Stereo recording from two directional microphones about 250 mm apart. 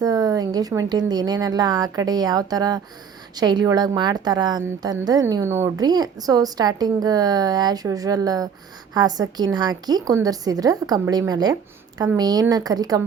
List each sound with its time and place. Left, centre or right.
0.0 s a woman's voice: centre